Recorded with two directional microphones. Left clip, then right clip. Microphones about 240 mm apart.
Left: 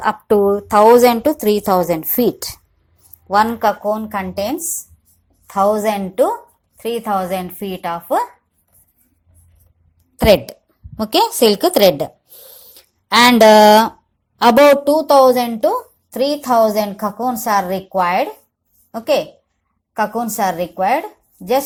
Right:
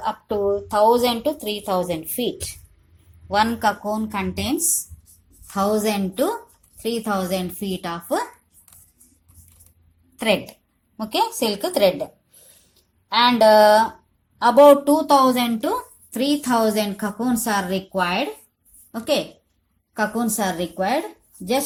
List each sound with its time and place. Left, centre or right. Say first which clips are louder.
0.0 s a woman's voice: left 9 dB; left
5.5 s a woman's voice: left 6 dB; left
10.2 s a woman's voice: left 9 dB; left
12.7 s a sound: left 7 dB; left
13.6 s a woman's voice: left 5 dB; left